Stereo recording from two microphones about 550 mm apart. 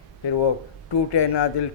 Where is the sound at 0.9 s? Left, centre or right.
Left.